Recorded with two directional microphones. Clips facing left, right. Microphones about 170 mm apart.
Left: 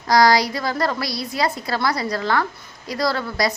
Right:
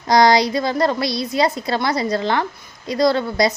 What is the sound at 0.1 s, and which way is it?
A woman's voice, 20° right (ahead or behind).